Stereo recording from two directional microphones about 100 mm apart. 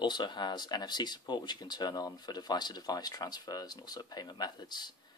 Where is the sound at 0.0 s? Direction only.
50° left (ahead or behind).